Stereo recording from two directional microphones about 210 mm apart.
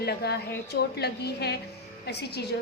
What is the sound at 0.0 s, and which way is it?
A woman's voice, 50° left (ahead or behind).